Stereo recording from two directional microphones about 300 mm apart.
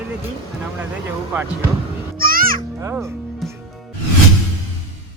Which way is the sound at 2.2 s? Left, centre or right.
Right.